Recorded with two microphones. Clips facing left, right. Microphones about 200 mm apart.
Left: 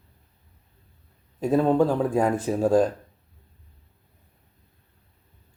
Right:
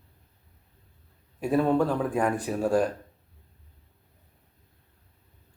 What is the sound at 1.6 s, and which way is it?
Speech, 20° left (ahead or behind).